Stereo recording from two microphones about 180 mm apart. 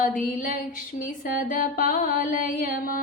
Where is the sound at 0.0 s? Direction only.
45° left (ahead or behind).